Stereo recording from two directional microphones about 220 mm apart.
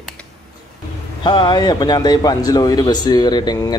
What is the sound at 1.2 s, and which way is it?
Speech, 20° left (ahead or behind).